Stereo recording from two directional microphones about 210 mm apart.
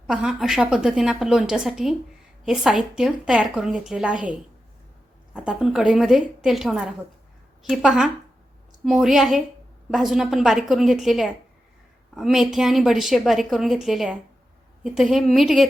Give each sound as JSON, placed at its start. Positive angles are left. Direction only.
{"t": 0.1, "sound": "a woman's voice", "side_deg": -5}